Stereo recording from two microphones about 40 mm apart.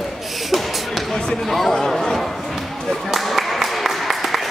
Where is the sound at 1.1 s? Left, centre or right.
Centre.